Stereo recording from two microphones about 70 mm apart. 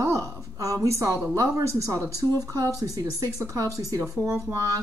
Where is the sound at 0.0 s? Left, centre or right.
Right.